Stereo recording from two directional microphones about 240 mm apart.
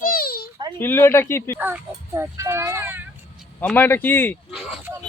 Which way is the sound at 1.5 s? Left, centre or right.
Centre.